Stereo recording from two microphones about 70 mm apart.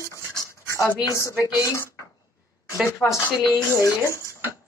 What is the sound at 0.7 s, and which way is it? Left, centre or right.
Speech, left.